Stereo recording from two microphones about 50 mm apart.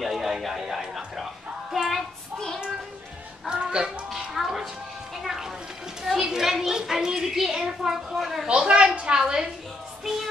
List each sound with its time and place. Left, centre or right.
0.0 s music: centre
3.4 s music: centre
6.0 s a child's voice: centre
8.5 s a woman's voice: centre